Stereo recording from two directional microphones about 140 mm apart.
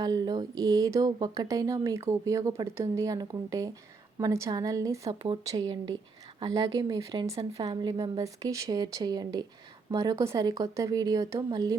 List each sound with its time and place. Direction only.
0.0 s speech: 30° right (ahead or behind)